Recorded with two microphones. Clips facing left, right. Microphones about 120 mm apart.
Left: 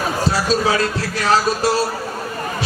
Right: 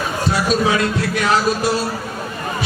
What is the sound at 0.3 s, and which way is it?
Music, 30° left (ahead or behind).